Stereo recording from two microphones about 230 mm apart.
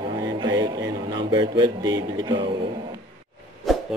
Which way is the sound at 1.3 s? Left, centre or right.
Centre.